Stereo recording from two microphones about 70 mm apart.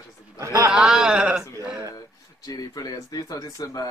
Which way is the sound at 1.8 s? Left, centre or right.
Left.